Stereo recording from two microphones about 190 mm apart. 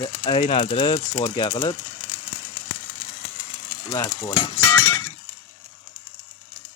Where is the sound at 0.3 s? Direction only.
25° left (ahead or behind).